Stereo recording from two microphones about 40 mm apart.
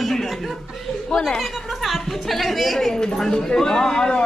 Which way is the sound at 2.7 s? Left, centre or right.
Centre.